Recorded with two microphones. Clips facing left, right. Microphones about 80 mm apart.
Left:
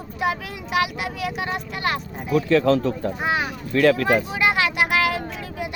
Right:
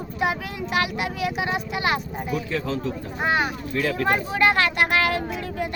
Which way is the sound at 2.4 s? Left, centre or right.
Left.